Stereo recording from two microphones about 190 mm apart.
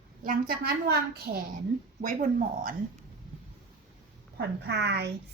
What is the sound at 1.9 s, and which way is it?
Speech, 45° right (ahead or behind).